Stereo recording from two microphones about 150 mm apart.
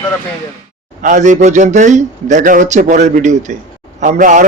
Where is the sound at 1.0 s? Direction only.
55° right (ahead or behind).